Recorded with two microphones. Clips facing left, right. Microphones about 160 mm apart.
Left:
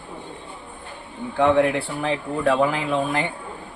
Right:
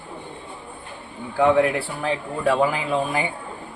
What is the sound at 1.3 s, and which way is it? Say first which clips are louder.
Speech: even; centre (ahead or behind).